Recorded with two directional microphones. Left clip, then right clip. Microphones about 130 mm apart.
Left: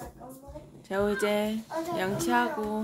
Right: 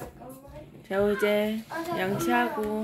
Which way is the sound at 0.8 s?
Centre (ahead or behind).